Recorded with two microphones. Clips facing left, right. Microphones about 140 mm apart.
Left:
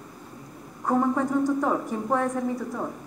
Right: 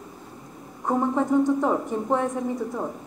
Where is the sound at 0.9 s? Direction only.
20° right (ahead or behind).